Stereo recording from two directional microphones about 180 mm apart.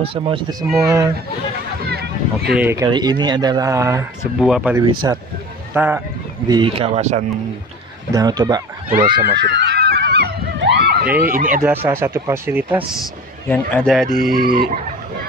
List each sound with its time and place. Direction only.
0.0 s speech: 30° right (ahead or behind)
1.9 s a sound: 60° right (ahead or behind)
2.5 s speech: 15° right (ahead or behind)
4.4 s speech: centre (ahead or behind)
5.1 s speech: 20° right (ahead or behind)
6.4 s speech: 25° right (ahead or behind)
8.1 s speech: 20° right (ahead or behind)
9.4 s a sound: 75° right (ahead or behind)
10.8 s snicker: 65° right (ahead or behind)
11.2 s speech: 50° right (ahead or behind)
11.6 s speech: 10° right (ahead or behind)
13.5 s a man's voice: 10° left (ahead or behind)
14.0 s speech: 55° right (ahead or behind)